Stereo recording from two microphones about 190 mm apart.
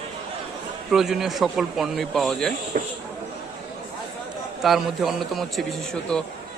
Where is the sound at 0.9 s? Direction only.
Centre (ahead or behind).